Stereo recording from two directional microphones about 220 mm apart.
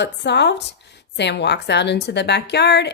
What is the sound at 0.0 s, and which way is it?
A woman's voice, 50° left (ahead or behind).